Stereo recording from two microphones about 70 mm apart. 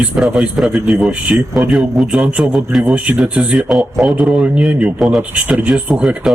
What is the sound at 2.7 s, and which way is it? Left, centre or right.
Speech, centre.